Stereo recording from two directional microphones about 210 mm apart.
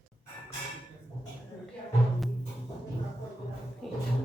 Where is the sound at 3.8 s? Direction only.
Centre (ahead or behind).